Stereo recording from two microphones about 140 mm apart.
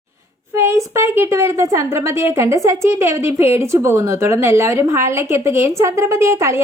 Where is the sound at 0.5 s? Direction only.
20° right (ahead or behind).